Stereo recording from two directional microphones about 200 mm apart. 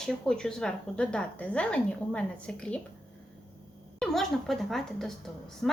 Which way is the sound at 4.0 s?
Centre (ahead or behind).